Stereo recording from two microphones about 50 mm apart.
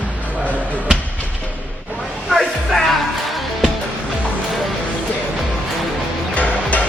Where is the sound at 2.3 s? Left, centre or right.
Centre.